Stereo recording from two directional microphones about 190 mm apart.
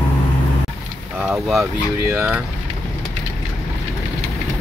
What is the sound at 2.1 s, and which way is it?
Speech, 5° right (ahead or behind).